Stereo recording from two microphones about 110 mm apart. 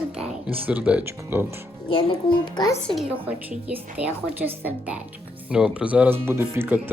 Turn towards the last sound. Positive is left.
turn(degrees=-20)  # may be behind; listen again after turning